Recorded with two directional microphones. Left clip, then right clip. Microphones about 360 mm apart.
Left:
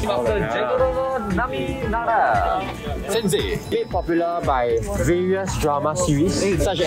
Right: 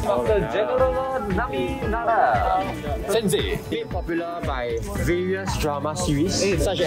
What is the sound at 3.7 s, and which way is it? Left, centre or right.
Speech, centre.